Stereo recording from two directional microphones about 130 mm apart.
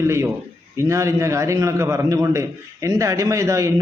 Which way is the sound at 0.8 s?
20° right (ahead or behind).